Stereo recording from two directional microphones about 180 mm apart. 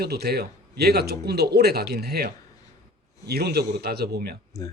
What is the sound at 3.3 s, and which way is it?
Speech, 60° right (ahead or behind).